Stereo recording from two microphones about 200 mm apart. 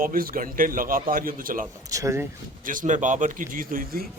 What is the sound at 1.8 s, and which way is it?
Speech, 15° right (ahead or behind).